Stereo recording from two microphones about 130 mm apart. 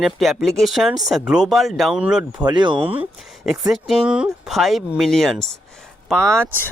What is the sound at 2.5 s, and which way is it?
Speech, 35° right (ahead or behind).